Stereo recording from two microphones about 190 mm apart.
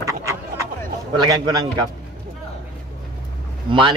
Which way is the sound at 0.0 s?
15° right (ahead or behind).